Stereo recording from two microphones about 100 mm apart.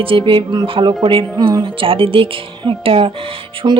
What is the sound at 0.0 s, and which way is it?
Speech, 60° right (ahead or behind).